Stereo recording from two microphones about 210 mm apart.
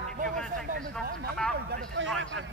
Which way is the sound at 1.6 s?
55° right (ahead or behind).